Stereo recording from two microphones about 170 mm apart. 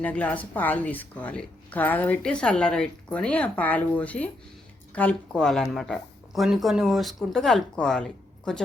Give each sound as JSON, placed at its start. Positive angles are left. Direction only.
{"t": 0.0, "sound": "speech", "side_deg": 10}